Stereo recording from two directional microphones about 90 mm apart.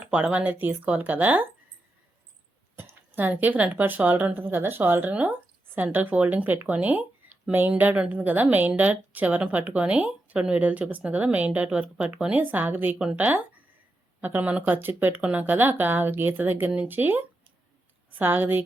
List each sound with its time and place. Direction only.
0.0 s speech: 15° right (ahead or behind)
2.7 s speech: 25° right (ahead or behind)